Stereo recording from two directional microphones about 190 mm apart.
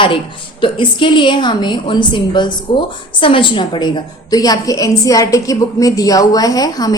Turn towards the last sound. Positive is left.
turn(degrees=20)  # may be behind; listen again after turning